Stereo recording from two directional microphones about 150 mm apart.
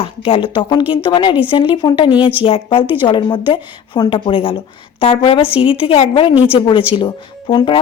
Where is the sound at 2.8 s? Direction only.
15° right (ahead or behind).